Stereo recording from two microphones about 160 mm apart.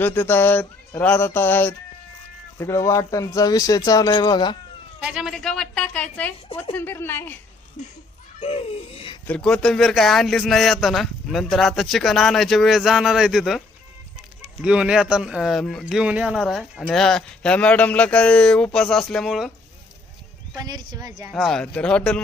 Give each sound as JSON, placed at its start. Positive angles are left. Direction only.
{"t": 0.0, "sound": "speech", "side_deg": 10}
{"t": 5.0, "sound": "speech", "side_deg": -5}
{"t": 8.4, "sound": "music", "side_deg": 40}
{"t": 9.2, "sound": "speech", "side_deg": 5}
{"t": 14.6, "sound": "speech", "side_deg": -5}
{"t": 20.6, "sound": "speech", "side_deg": -25}
{"t": 21.2, "sound": "speech", "side_deg": -5}
{"t": 21.5, "sound": "speech", "side_deg": 5}